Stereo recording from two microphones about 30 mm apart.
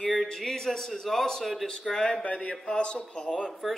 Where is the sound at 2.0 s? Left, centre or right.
Left.